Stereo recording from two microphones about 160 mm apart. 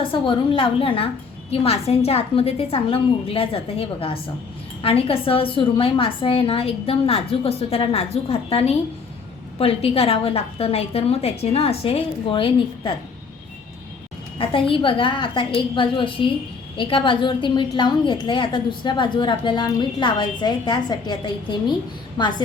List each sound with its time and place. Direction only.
0.0 s a woman's voice: 30° left (ahead or behind)
14.3 s a woman's voice: 35° left (ahead or behind)